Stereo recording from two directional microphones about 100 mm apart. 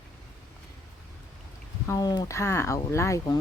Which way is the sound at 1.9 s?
40° left (ahead or behind).